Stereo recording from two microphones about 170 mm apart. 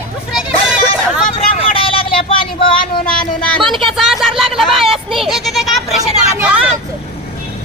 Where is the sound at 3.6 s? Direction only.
Centre (ahead or behind).